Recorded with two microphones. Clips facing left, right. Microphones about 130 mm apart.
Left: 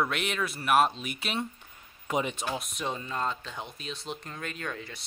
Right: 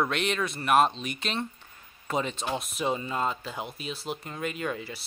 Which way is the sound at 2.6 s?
5° right (ahead or behind).